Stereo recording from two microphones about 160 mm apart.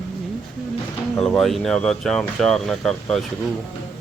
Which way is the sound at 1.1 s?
5° left (ahead or behind).